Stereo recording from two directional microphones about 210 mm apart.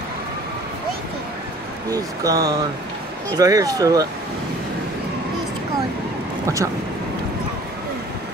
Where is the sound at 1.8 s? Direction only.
15° right (ahead or behind).